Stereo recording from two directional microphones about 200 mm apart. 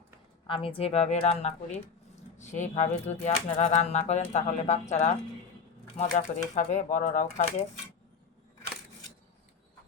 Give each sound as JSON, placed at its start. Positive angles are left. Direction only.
{"t": 0.4, "sound": "speech", "side_deg": 25}